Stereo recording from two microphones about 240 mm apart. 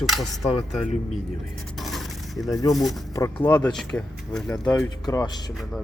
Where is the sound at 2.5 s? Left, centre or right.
Centre.